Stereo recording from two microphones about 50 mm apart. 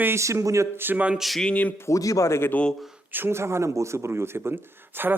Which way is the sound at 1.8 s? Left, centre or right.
Left.